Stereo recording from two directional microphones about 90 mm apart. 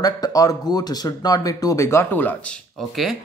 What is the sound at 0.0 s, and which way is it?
Speech, 45° left (ahead or behind).